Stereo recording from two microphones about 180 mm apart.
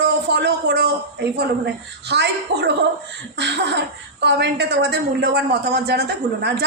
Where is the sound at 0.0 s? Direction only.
65° right (ahead or behind).